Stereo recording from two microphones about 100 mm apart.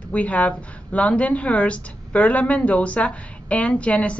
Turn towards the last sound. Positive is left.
turn(degrees=10)  # may be behind; listen again after turning